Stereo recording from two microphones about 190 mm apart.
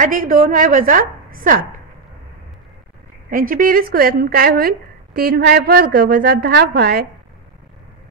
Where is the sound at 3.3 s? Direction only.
45° right (ahead or behind).